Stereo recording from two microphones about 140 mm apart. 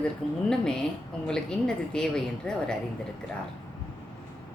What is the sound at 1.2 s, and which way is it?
A woman's voice, 5° left (ahead or behind).